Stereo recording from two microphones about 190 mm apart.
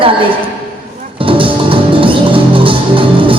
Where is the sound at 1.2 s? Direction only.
25° right (ahead or behind).